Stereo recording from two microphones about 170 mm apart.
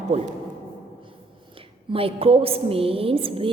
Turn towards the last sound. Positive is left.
turn(degrees=-30)  # may be behind; listen again after turning